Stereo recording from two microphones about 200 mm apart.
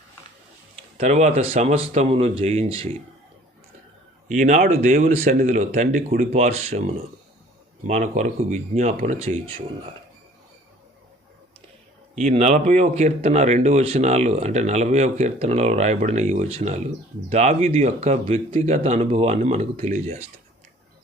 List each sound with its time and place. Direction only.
0.9 s speech: 35° right (ahead or behind)
4.3 s speech: 35° right (ahead or behind)
12.2 s speech: 35° right (ahead or behind)